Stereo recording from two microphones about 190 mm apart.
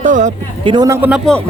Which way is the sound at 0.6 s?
20° right (ahead or behind).